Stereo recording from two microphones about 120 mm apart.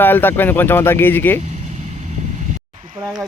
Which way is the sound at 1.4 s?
85° right.